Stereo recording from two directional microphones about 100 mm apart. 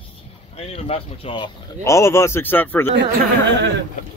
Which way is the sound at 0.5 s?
90° left.